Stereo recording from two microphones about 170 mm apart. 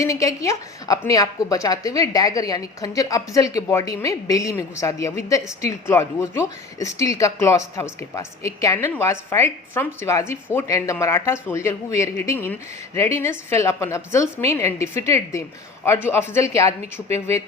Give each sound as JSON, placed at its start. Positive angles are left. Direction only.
{"t": 0.0, "sound": "a woman's voice", "side_deg": 20}